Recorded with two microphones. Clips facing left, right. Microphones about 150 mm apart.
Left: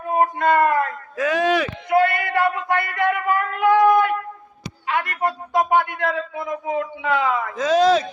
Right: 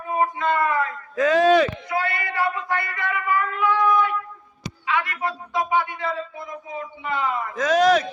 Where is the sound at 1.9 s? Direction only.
55° left (ahead or behind).